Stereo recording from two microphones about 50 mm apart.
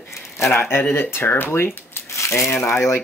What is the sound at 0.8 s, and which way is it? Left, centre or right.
Speech, left.